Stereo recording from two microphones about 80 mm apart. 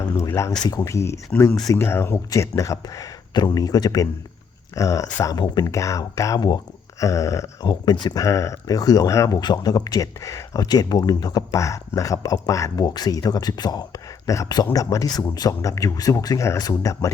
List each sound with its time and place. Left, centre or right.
0.3 s a sound: left
1.7 s speech: left
7.0 s a sound: left
7.6 s speech: left
8.2 s speech: left
9.4 s speech: left
12.8 s speech: left